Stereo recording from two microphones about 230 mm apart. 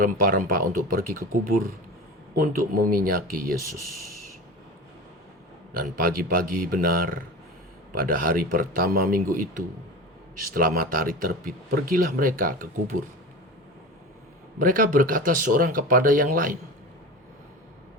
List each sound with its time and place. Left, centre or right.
0.0 s speech: right
2.4 s speech: right
5.7 s speech: right
14.6 s speech: right